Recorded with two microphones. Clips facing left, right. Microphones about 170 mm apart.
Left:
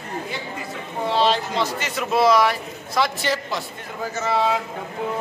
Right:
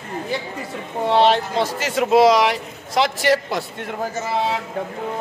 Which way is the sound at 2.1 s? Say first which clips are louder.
Right 3 dB; 90° right.